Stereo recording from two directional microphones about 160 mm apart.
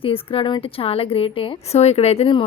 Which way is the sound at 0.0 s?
35° left (ahead or behind).